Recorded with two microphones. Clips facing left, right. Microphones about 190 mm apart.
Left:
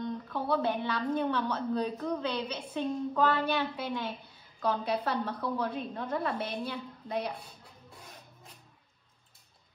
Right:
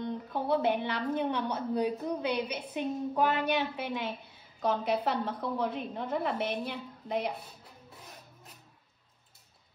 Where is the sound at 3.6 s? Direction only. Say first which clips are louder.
Even; 20° right (ahead or behind).